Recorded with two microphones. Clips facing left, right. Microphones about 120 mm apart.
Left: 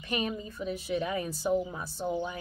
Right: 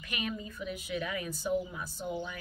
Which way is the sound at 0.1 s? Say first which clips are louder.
Left 5 dB; 35° left (ahead or behind).